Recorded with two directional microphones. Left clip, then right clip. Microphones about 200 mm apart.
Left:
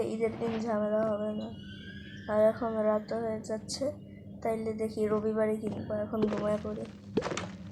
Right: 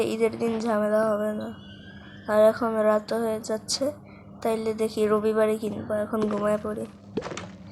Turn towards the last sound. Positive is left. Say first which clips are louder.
# even
turn(degrees=0)  # may be behind; listen again after turning